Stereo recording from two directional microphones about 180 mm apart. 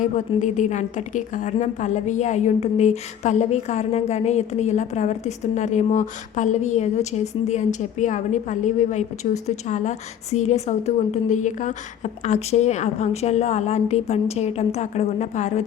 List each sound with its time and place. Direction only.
0.0 s a woman's voice: 40° left (ahead or behind)